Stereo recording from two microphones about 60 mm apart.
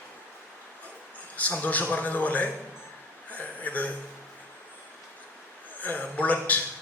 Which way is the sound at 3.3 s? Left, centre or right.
Left.